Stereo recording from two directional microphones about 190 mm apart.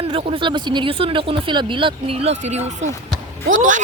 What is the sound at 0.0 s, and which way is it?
Speech, 30° right (ahead or behind).